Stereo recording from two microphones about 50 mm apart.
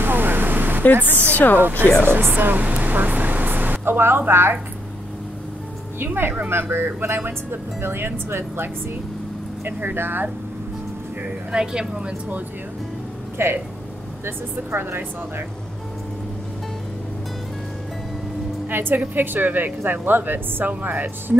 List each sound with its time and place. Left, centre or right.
0.0 s a sound: right
0.9 s speech: right
1.3 s speech: left
1.6 s speech: right
6.5 s speech: right
9.7 s speech: right
11.5 s a woman's voice: centre
13.4 s speech: right
18.7 s a woman's voice: right